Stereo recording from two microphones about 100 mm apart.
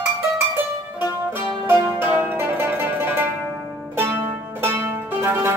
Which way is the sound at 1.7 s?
15° right (ahead or behind).